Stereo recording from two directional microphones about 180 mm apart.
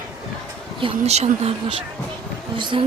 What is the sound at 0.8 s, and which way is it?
A woman's voice, 35° right (ahead or behind).